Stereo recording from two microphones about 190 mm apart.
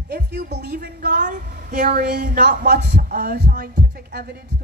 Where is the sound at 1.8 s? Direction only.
55° right (ahead or behind).